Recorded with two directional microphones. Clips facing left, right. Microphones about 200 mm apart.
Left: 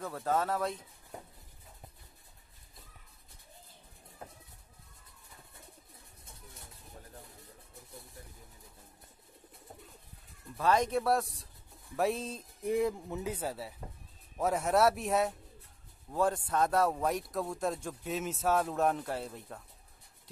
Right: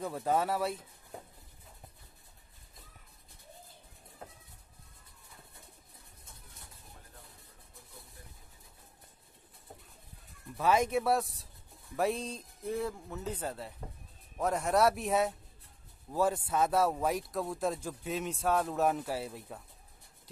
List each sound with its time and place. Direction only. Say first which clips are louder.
0.0 s speech: right 1 dB; 15° right (ahead or behind)
10.6 s a man's voice: even; 5° right (ahead or behind)
12.6 s a man's voice: left 5 dB; 15° left (ahead or behind); by 19.6 s 5° right (ahead or behind)